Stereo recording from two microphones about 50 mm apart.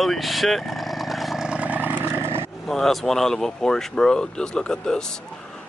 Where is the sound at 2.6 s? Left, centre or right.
Centre.